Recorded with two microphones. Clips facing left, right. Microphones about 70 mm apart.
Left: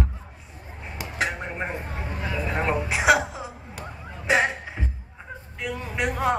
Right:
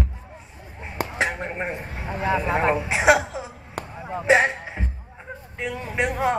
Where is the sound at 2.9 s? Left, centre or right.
Right.